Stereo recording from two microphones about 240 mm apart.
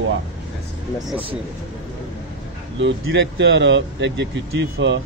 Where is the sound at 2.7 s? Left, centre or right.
Right.